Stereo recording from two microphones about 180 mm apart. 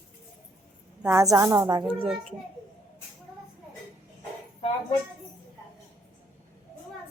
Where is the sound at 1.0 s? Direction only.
15° right (ahead or behind).